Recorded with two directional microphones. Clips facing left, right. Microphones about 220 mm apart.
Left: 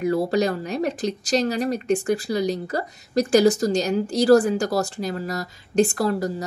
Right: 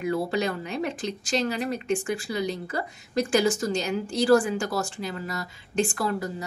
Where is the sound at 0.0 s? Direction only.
40° left (ahead or behind).